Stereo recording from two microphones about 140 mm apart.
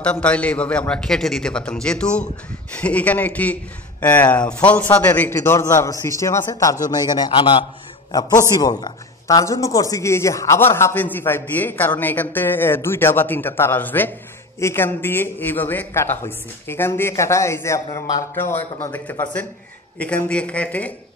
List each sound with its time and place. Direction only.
0.0 s a man's voice: 10° left (ahead or behind)